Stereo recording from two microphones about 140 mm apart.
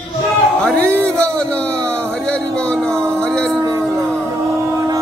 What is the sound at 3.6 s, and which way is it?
Music, 25° right (ahead or behind).